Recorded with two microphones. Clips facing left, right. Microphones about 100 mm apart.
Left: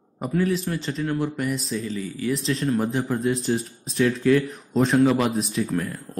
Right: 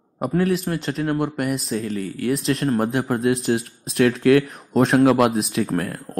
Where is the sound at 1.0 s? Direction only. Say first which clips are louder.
Right 3 dB; 55° right (ahead or behind); by 2.7 s 80° right.